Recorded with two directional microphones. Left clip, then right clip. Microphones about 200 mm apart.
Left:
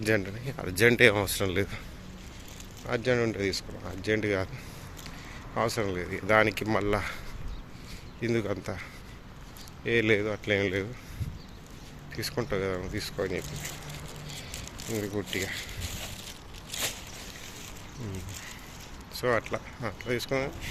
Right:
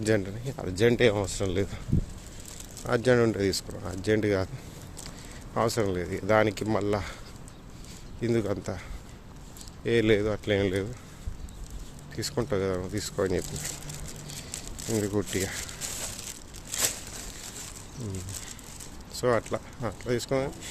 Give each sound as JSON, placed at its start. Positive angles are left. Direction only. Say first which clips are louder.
{"t": 0.0, "sound": "speech", "louder": "right 1 dB", "side_deg": -20}
{"t": 2.8, "sound": "speech", "louder": "right 4 dB", "side_deg": -35}
{"t": 5.5, "sound": "speech", "louder": "right 2 dB", "side_deg": -30}
{"t": 8.2, "sound": "speech", "louder": "right 2 dB", "side_deg": -20}
{"t": 12.1, "sound": "speech", "louder": "right 2 dB", "side_deg": -20}
{"t": 14.5, "sound": "a sound", "louder": "right 4 dB", "side_deg": -35}
{"t": 19.2, "sound": "speech", "louder": "right 2 dB", "side_deg": -25}